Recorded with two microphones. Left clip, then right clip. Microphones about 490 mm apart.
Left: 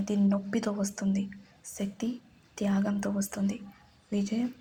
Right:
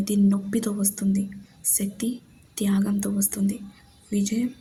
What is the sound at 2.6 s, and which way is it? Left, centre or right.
Speech, right.